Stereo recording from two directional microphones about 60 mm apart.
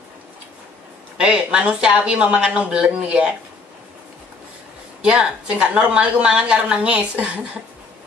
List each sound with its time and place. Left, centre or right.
1.1 s speech: centre
5.0 s a woman's voice: centre